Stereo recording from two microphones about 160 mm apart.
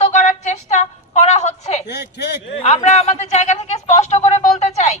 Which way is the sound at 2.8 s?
45° left (ahead or behind).